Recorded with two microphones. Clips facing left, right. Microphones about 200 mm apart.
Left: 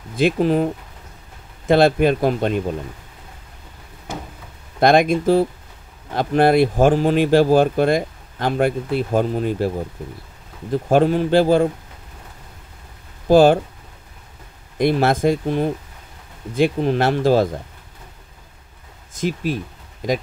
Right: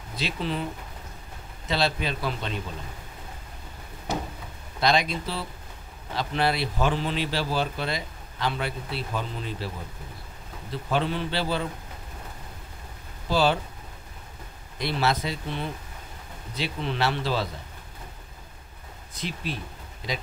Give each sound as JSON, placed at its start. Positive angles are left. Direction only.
{"t": 0.1, "sound": "speech", "side_deg": 50}
{"t": 1.7, "sound": "speech", "side_deg": 50}
{"t": 4.7, "sound": "speech", "side_deg": 50}
{"t": 10.7, "sound": "speech", "side_deg": 50}
{"t": 13.3, "sound": "speech", "side_deg": 50}
{"t": 14.8, "sound": "speech", "side_deg": 50}
{"t": 19.1, "sound": "speech", "side_deg": 45}